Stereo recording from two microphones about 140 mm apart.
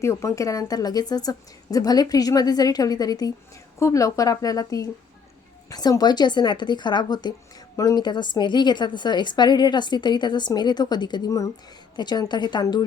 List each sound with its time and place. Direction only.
0.0 s a woman's voice: 20° left (ahead or behind)